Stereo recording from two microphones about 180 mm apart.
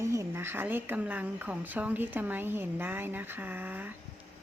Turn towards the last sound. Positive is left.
turn(degrees=-10)  # may be behind; listen again after turning